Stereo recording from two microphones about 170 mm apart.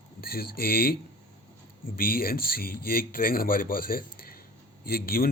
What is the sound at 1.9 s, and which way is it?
A man's voice, 60° left (ahead or behind).